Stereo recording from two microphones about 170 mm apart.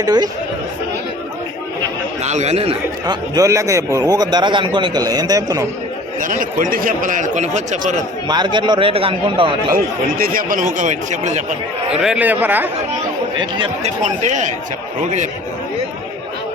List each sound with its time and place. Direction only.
0.0 s a man's voice: 25° right (ahead or behind)
2.2 s speech: 40° right (ahead or behind)
3.3 s a man's voice: 20° right (ahead or behind)
6.1 s speech: 50° right (ahead or behind)
8.3 s a man's voice: 25° right (ahead or behind)
9.7 s speech: 60° right (ahead or behind)
12.0 s a man's voice: 10° right (ahead or behind)
13.3 s a man's voice: 25° right (ahead or behind)
13.8 s speech: 45° right (ahead or behind)